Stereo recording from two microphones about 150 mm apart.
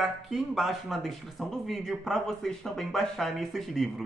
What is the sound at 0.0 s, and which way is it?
Speech, centre (ahead or behind).